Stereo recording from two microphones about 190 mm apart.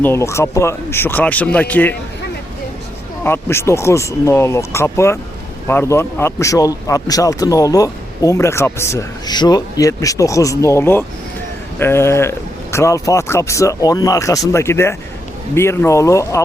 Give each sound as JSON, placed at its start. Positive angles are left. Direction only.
{"t": 0.0, "sound": "a man's voice", "side_deg": 15}
{"t": 3.2, "sound": "a man's voice", "side_deg": 15}